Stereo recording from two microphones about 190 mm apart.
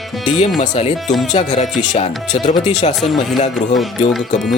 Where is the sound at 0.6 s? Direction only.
35° left (ahead or behind).